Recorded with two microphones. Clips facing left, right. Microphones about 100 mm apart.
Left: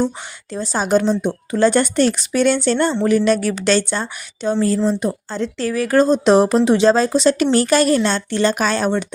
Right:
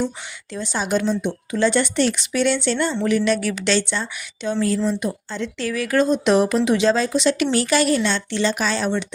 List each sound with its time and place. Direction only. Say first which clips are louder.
0.5 s a woman's voice: left 5 dB; 40° left (ahead or behind)